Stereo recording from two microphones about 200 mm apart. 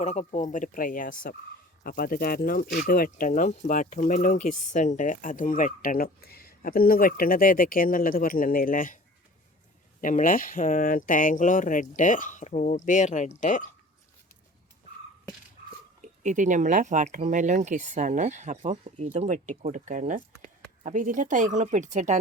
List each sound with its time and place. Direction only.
0.0 s speech: 35° left (ahead or behind)
10.0 s speech: 40° left (ahead or behind)
16.0 s speech: 35° right (ahead or behind)